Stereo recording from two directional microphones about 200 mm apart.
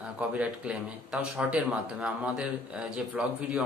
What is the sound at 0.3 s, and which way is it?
A man's voice, 5° right (ahead or behind).